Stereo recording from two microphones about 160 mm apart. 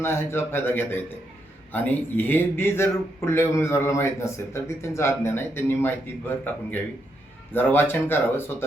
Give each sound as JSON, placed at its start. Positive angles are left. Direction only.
{"t": 0.0, "sound": "a man's voice", "side_deg": 15}